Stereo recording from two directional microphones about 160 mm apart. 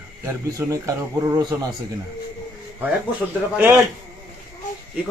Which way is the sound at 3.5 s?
15° right (ahead or behind).